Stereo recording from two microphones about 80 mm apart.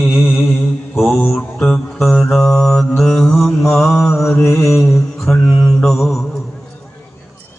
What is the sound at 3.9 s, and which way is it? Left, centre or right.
Mantra, left.